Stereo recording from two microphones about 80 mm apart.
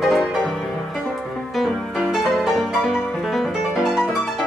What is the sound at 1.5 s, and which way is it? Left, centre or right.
Music, centre.